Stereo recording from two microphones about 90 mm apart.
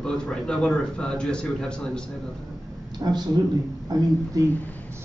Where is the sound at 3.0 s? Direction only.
50° right (ahead or behind).